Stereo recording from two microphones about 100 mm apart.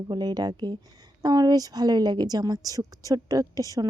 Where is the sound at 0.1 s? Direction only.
45° right (ahead or behind).